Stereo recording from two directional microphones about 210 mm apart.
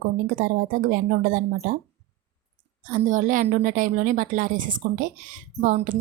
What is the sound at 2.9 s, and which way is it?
Speech, 40° right (ahead or behind).